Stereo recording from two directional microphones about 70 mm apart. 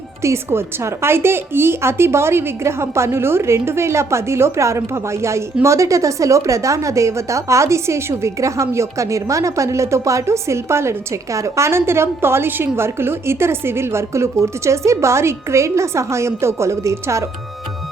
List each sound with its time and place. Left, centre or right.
0.2 s a woman's voice: right